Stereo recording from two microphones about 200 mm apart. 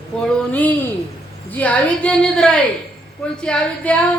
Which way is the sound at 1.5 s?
5° left (ahead or behind).